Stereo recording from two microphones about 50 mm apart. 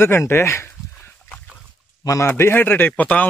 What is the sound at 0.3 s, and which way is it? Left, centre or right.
Speech, left.